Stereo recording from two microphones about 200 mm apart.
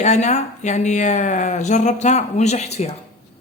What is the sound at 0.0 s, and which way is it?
Speech, 35° left (ahead or behind).